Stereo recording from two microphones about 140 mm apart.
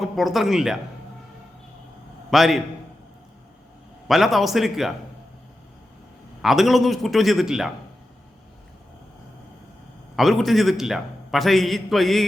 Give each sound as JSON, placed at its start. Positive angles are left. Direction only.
{"t": 0.0, "sound": "speech", "side_deg": 0}
{"t": 2.3, "sound": "a man's voice", "side_deg": 0}
{"t": 4.1, "sound": "a man's voice", "side_deg": 0}
{"t": 6.4, "sound": "a man's voice", "side_deg": 0}
{"t": 10.2, "sound": "a man's voice", "side_deg": 0}